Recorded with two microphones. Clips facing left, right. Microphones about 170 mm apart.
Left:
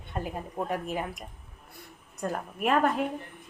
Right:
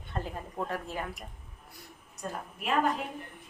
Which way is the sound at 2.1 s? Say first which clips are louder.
Left 6 dB; 55° left (ahead or behind).